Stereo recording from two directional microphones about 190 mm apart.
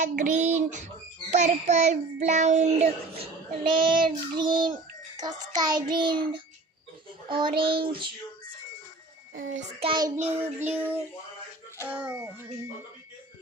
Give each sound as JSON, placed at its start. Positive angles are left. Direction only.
{"t": 0.0, "sound": "a child's voice", "side_deg": -40}
{"t": 3.7, "sound": "child singing", "side_deg": -25}
{"t": 9.3, "sound": "a child's voice", "side_deg": -45}
{"t": 9.8, "sound": "child singing", "side_deg": -30}
{"t": 10.4, "sound": "child singing", "side_deg": -10}